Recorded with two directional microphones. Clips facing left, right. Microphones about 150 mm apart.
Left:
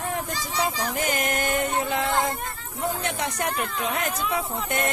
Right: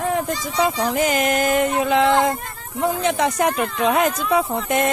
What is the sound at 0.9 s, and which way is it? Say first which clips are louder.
Speech: right 7 dB; 90° right.